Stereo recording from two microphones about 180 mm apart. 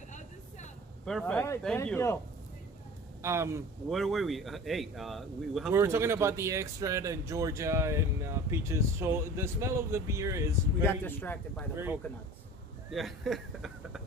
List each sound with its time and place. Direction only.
1.0 s a man's voice: 5° left (ahead or behind)
3.2 s speech: 15° right (ahead or behind)
3.9 s speech: centre (ahead or behind)
5.7 s speech: 15° right (ahead or behind)
10.8 s a man's voice: 10° left (ahead or behind)
11.7 s speech: 10° right (ahead or behind)
12.9 s speech: centre (ahead or behind)